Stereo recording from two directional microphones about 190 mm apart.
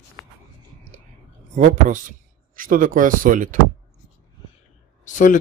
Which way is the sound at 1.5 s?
40° right (ahead or behind).